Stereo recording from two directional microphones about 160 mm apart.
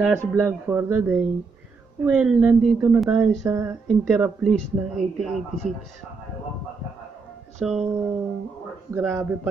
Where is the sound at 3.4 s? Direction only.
20° right (ahead or behind).